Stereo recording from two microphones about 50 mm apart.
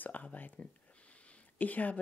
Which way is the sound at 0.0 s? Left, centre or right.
Left.